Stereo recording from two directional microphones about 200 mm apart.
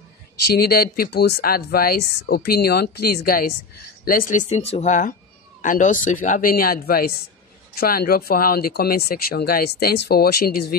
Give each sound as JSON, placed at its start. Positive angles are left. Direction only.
{"t": 0.6, "sound": "speech", "side_deg": 50}